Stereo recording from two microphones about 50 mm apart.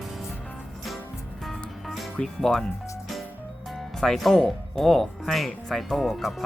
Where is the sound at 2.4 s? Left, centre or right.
Centre.